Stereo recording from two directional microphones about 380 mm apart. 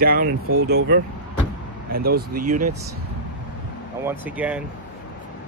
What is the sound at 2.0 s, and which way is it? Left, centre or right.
Speech, right.